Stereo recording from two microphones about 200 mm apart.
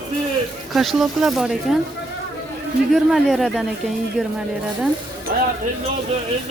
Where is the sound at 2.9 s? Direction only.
Centre (ahead or behind).